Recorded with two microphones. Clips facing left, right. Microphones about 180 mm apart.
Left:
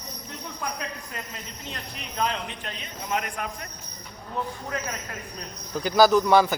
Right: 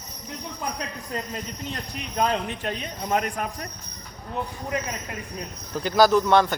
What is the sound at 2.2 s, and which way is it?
A man's voice, 45° right (ahead or behind).